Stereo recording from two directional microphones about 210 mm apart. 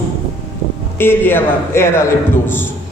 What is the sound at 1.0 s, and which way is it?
Speech, 10° left (ahead or behind).